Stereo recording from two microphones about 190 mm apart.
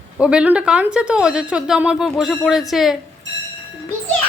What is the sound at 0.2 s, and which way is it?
Speech, 5° right (ahead or behind).